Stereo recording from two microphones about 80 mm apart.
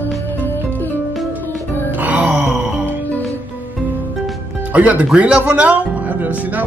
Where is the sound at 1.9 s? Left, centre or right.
Right.